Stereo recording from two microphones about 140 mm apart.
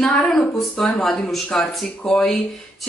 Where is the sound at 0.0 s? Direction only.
5° left (ahead or behind).